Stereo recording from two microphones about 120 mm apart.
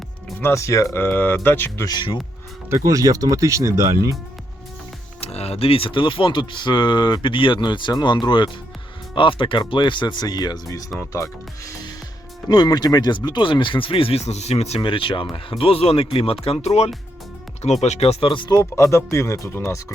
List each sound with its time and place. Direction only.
0.3 s speech: 20° left (ahead or behind)
0.9 s speech: 15° left (ahead or behind)
1.8 s speech: 35° left (ahead or behind)
2.6 s speech: 25° right (ahead or behind)
5.2 s speech: 60° left (ahead or behind)
14.8 s speech: 45° left (ahead or behind)
18.6 s speech: 25° left (ahead or behind)